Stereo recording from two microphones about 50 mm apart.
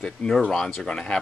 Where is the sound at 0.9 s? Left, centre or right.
Centre.